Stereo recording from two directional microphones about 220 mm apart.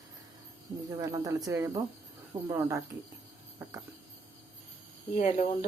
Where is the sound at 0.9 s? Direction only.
15° right (ahead or behind).